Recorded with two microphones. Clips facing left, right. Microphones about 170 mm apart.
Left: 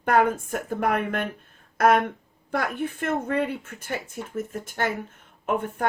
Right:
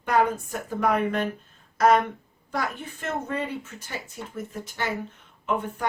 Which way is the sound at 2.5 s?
55° left (ahead or behind).